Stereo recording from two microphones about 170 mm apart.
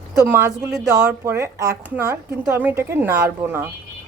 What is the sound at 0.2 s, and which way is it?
Speech, 15° right (ahead or behind).